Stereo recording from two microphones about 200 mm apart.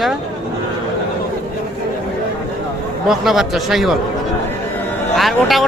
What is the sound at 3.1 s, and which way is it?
Speech, centre (ahead or behind).